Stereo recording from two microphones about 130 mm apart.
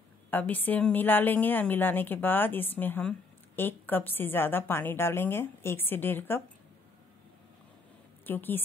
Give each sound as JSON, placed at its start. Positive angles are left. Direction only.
{"t": 0.3, "sound": "a woman's voice", "side_deg": 15}
{"t": 8.3, "sound": "a woman's voice", "side_deg": 15}